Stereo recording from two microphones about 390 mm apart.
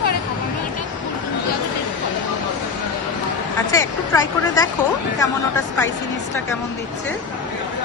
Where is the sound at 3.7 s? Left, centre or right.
Centre.